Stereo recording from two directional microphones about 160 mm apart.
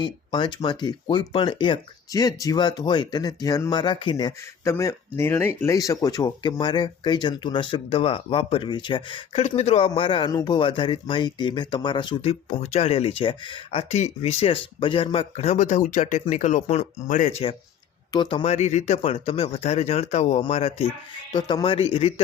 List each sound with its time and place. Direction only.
0.0 s speech: 30° left (ahead or behind)
18.1 s speech: 30° left (ahead or behind)
18.4 s a man's voice: 45° left (ahead or behind)